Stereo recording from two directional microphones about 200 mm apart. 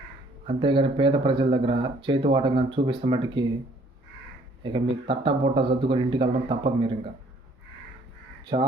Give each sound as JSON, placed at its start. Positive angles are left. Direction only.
{"t": 0.4, "sound": "speech", "side_deg": -25}
{"t": 4.6, "sound": "speech", "side_deg": -25}
{"t": 8.5, "sound": "speech", "side_deg": -30}